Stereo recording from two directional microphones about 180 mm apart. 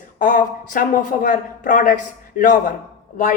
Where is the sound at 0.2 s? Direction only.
45° left (ahead or behind).